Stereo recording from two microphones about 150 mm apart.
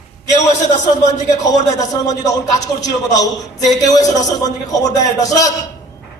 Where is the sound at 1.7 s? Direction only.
25° left (ahead or behind).